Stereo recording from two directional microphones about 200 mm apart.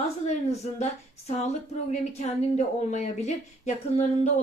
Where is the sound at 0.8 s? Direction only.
35° left (ahead or behind).